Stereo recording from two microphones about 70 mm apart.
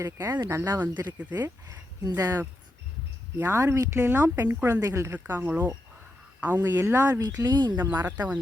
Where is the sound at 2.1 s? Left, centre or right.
Right.